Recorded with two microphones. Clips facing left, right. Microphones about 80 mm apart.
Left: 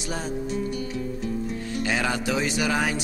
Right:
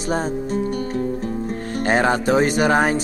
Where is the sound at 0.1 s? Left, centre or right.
Right.